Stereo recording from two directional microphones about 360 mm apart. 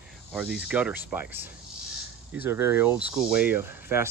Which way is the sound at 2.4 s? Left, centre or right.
Centre.